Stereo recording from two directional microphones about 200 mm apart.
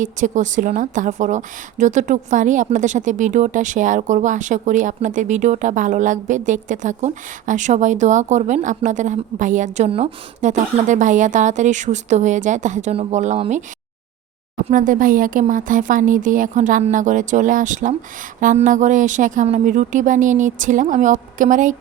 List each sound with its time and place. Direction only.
0.0 s a woman's voice: 40° right (ahead or behind)